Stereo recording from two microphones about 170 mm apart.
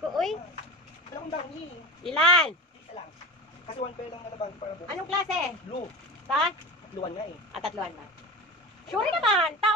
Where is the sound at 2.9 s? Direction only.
35° left (ahead or behind).